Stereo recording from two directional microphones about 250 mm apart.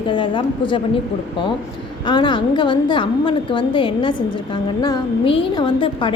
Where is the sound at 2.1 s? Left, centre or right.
Centre.